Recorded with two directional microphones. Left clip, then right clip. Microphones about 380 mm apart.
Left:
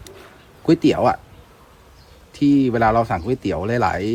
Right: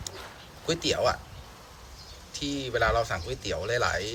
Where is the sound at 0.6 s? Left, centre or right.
Centre.